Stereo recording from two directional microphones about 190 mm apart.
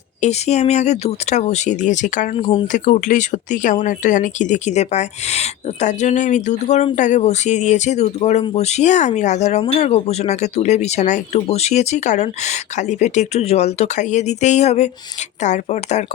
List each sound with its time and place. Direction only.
0.2 s speech: 35° left (ahead or behind)
2.4 s speech: 25° left (ahead or behind)
2.7 s speech: 40° left (ahead or behind)